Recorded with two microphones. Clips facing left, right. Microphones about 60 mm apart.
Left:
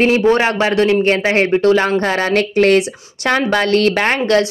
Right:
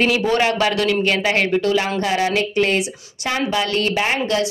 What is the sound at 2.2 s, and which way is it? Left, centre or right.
A woman's voice, left.